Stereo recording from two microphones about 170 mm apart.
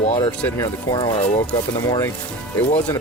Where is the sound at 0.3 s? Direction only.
15° left (ahead or behind).